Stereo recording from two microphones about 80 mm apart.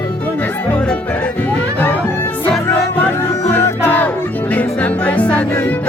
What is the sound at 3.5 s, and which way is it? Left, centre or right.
Music, left.